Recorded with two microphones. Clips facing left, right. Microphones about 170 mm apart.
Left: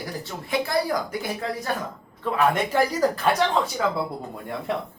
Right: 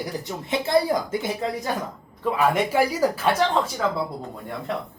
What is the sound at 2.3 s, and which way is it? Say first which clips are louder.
Speech: even; 10° right (ahead or behind).